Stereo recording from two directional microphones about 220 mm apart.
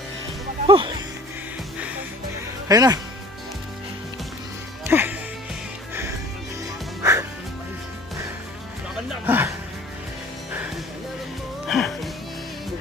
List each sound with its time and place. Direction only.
0.7 s speech: 20° right (ahead or behind)
2.6 s speech: 15° right (ahead or behind)
4.9 s music: 10° right (ahead or behind)
7.0 s music: 15° right (ahead or behind)
9.2 s music: 10° right (ahead or behind)
11.7 s music: centre (ahead or behind)